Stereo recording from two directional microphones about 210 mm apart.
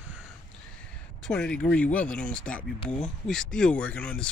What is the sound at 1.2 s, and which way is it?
Speech, 5° left (ahead or behind).